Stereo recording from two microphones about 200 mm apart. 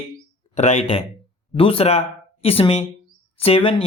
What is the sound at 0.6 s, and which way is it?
Speech, 35° left (ahead or behind).